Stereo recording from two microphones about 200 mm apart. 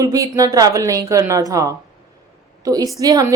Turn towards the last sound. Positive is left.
turn(degrees=-20)  # may be behind; listen again after turning